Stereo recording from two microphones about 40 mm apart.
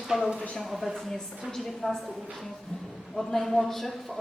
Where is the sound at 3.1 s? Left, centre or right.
Centre.